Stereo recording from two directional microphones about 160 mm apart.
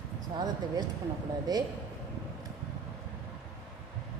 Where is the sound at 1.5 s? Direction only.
25° right (ahead or behind).